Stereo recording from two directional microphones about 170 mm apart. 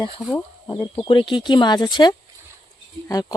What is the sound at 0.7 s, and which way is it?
Speech, 30° left (ahead or behind).